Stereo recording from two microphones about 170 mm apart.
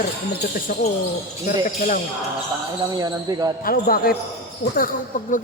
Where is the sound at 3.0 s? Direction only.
25° right (ahead or behind).